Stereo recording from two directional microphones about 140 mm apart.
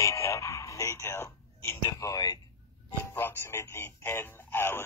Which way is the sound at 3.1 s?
15° left (ahead or behind).